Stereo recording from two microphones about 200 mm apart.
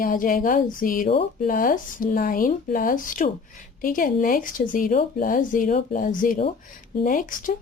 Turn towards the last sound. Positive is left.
turn(degrees=40)  # may be behind; listen again after turning